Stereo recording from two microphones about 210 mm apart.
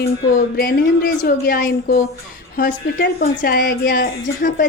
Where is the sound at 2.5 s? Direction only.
45° left (ahead or behind).